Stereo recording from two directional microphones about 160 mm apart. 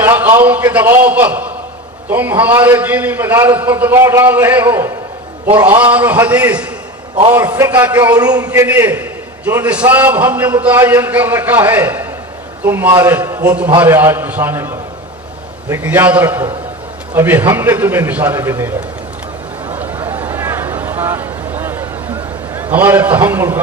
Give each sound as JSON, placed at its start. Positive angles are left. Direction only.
{"t": 0.0, "sound": "a man's voice", "side_deg": -10}
{"t": 5.9, "sound": "a man's voice", "side_deg": -10}
{"t": 8.1, "sound": "a man's voice", "side_deg": -25}
{"t": 8.4, "sound": "a man's voice", "side_deg": -10}
{"t": 19.7, "sound": "a sound", "side_deg": -10}
{"t": 22.5, "sound": "a man's voice", "side_deg": -10}